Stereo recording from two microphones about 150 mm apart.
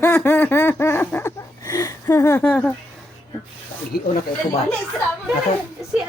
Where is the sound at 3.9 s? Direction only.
90° left.